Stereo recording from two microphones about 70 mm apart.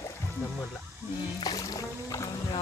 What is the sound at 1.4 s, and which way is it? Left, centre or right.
Music, left.